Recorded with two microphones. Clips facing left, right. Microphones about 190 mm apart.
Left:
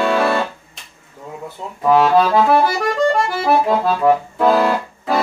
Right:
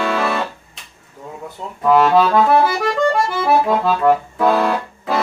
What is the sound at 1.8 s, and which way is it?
Accordion, centre (ahead or behind).